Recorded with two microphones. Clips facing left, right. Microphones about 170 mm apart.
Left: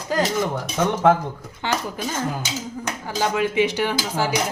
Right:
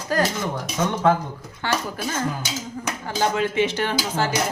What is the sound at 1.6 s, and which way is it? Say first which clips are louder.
Speech: even; 15° left (ahead or behind).